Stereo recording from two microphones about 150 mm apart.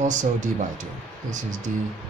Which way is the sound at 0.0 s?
55° right (ahead or behind).